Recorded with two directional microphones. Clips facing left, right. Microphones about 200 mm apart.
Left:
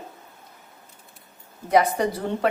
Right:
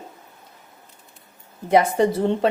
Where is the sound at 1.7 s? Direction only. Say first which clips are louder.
Right 3 dB; 25° right (ahead or behind).